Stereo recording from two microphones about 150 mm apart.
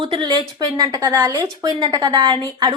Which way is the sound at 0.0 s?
35° right (ahead or behind).